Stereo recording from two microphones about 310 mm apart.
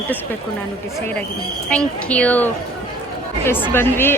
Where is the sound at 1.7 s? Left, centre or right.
Centre.